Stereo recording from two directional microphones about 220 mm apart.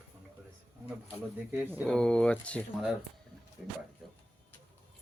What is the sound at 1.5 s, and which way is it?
Speech, 10° right (ahead or behind).